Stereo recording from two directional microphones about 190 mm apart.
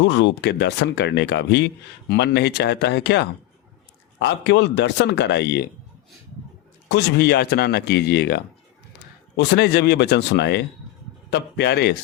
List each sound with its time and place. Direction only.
0.0 s speech: 70° left (ahead or behind)
6.8 s speech: 65° left (ahead or behind)